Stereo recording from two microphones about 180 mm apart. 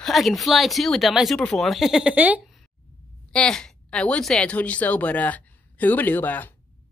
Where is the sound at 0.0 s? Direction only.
Centre (ahead or behind).